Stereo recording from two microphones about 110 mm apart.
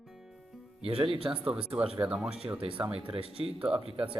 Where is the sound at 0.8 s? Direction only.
60° right (ahead or behind).